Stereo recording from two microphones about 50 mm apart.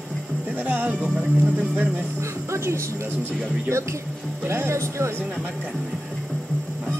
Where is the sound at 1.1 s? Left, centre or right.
Right.